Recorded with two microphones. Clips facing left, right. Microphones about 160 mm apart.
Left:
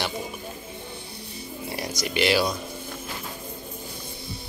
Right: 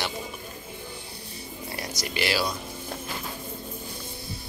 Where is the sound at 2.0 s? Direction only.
20° left (ahead or behind).